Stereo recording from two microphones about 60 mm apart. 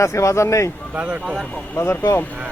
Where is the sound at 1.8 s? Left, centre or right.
Left.